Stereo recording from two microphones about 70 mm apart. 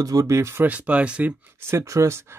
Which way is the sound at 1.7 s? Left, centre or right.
Right.